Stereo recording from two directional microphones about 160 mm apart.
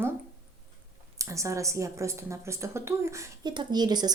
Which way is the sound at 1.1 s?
20° right (ahead or behind).